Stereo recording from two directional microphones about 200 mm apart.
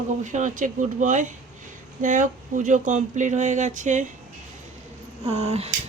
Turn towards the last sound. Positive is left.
turn(degrees=-30)  # may be behind; listen again after turning